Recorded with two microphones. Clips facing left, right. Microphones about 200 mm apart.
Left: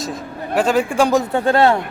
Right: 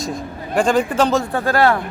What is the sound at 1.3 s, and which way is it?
Speech, 25° left (ahead or behind).